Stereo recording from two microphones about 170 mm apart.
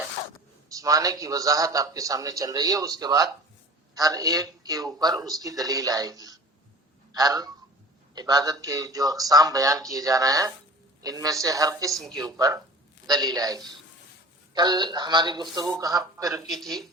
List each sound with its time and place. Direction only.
0.7 s a man's voice: 20° right (ahead or behind)
16.5 s speech: centre (ahead or behind)